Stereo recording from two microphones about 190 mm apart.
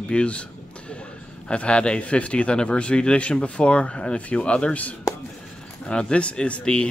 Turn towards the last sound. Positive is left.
turn(degrees=5)  # may be behind; listen again after turning